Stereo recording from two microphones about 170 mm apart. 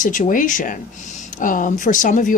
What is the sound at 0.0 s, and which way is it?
Speech, 50° left (ahead or behind).